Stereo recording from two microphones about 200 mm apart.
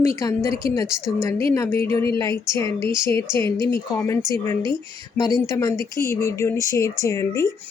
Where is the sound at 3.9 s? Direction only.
10° left (ahead or behind).